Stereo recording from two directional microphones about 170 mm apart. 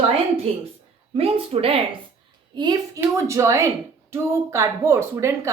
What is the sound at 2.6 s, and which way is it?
Speech, 20° right (ahead or behind).